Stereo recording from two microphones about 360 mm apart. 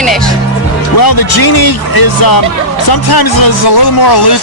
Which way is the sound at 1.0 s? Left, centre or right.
Left.